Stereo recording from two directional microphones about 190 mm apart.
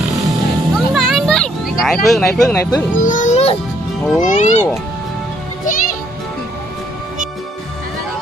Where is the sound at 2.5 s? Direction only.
15° left (ahead or behind).